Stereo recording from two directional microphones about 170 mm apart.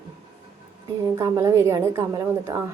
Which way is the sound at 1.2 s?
15° right (ahead or behind).